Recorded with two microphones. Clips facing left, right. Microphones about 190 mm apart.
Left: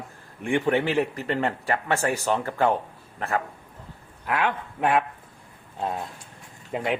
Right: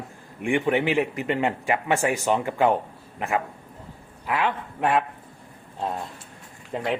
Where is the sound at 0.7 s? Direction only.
15° right (ahead or behind).